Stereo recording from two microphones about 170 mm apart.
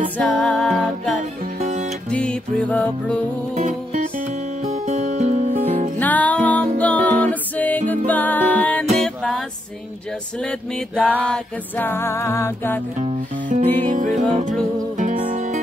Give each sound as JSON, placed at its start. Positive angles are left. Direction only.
{"t": 0.2, "sound": "music", "side_deg": 5}
{"t": 1.6, "sound": "music", "side_deg": -45}
{"t": 2.0, "sound": "music", "side_deg": 5}
{"t": 3.5, "sound": "music", "side_deg": -50}
{"t": 5.9, "sound": "music", "side_deg": 10}
{"t": 11.0, "sound": "music", "side_deg": -10}
{"t": 11.2, "sound": "music", "side_deg": 10}
{"t": 13.0, "sound": "music", "side_deg": -50}